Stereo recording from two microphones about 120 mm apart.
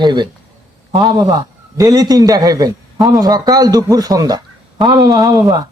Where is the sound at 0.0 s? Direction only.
40° right (ahead or behind).